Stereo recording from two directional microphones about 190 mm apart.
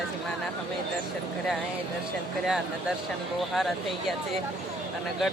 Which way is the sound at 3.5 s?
Centre (ahead or behind).